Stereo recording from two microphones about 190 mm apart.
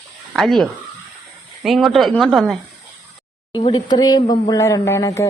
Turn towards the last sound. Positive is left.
turn(degrees=15)  # may be behind; listen again after turning